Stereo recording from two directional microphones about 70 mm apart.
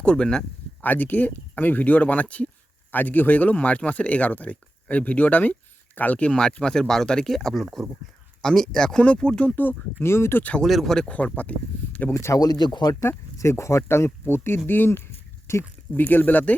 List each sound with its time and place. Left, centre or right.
0.0 s speech: centre
0.8 s speech: left
10.0 s speech: left
10.6 s speech: centre
12.1 s speech: left
13.0 s speech: left